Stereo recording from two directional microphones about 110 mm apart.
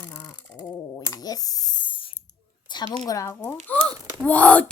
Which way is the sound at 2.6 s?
40° left (ahead or behind).